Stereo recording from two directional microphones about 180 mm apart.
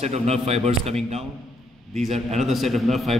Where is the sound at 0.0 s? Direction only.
35° right (ahead or behind).